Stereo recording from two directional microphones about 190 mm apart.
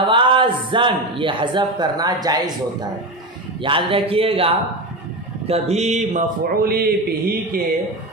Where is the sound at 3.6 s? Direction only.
25° right (ahead or behind); by 6.9 s 55° right (ahead or behind).